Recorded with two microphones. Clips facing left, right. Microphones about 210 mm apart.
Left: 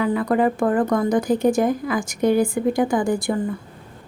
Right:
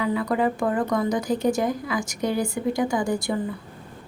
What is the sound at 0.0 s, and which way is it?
A woman's voice, 50° left (ahead or behind).